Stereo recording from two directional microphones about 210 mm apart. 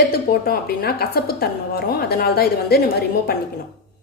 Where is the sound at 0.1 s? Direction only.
45° left (ahead or behind).